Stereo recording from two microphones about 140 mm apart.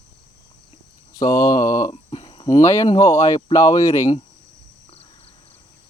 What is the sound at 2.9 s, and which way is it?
Speech, 25° left (ahead or behind).